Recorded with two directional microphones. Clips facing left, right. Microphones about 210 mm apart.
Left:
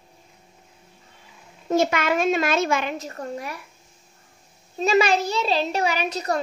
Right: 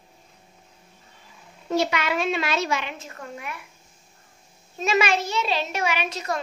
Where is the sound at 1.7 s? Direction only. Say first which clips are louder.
Left 3 dB; 50° left (ahead or behind).